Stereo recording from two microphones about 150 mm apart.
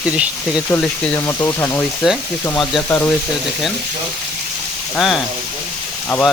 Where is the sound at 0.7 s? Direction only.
10° left (ahead or behind).